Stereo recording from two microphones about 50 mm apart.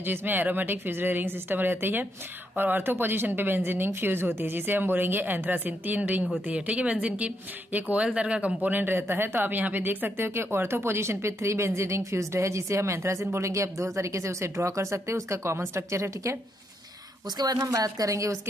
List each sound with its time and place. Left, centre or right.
0.0 s a woman's voice: right
8.7 s speech: right
17.6 s speech: right